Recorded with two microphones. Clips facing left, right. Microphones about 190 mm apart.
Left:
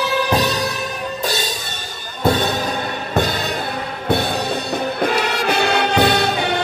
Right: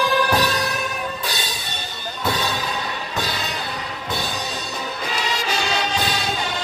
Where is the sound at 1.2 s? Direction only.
45° left (ahead or behind).